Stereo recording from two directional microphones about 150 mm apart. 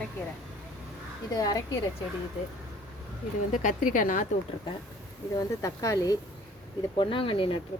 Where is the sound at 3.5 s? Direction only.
60° left (ahead or behind).